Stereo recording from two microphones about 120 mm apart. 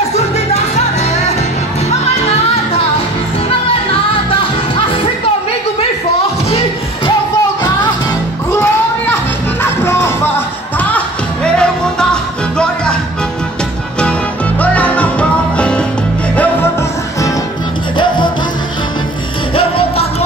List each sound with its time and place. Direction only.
1.9 s music: 60° left (ahead or behind)
9.6 s music: 20° left (ahead or behind)
14.6 s music: 10° left (ahead or behind)
17.9 s music: 40° left (ahead or behind)
19.5 s music: 50° left (ahead or behind)